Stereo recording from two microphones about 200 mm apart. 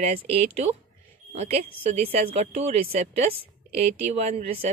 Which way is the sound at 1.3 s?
30° right (ahead or behind).